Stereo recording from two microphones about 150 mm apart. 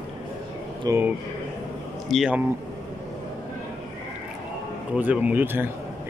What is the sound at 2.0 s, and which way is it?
Speech, centre (ahead or behind).